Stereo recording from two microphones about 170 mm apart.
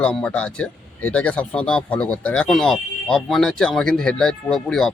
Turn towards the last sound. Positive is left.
turn(degrees=5)  # may be behind; listen again after turning